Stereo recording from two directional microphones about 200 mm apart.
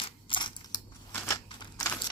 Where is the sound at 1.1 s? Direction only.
10° left (ahead or behind).